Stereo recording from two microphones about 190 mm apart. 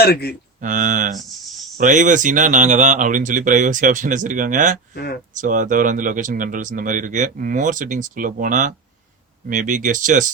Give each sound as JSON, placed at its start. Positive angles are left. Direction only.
{"t": 0.0, "sound": "speech", "side_deg": 55}
{"t": 0.6, "sound": "speech", "side_deg": -40}